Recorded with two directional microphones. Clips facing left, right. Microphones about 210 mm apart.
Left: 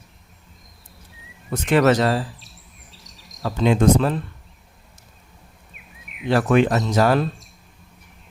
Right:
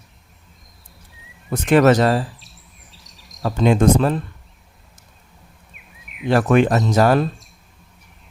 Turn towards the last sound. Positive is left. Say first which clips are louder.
# right 2 dB
turn(degrees=-45)  # may be behind; listen again after turning